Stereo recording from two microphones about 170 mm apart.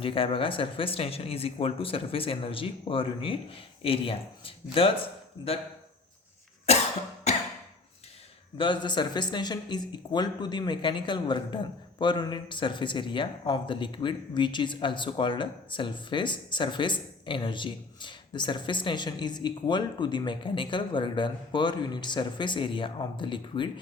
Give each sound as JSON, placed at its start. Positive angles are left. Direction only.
{"t": 0.0, "sound": "speech", "side_deg": 30}
{"t": 6.7, "sound": "cough", "side_deg": 40}
{"t": 8.5, "sound": "speech", "side_deg": 30}